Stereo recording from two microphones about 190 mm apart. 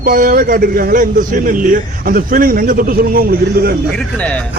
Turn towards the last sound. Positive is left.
turn(degrees=-50)  # may be behind; listen again after turning